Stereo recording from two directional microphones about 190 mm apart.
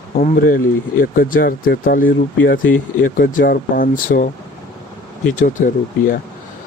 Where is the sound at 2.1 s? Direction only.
80° left.